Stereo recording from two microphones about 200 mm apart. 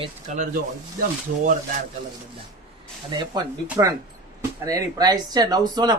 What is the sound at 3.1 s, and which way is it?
Speech, 20° right (ahead or behind).